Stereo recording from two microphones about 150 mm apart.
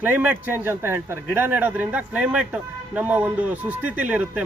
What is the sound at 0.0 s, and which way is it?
Speech, 10° right (ahead or behind).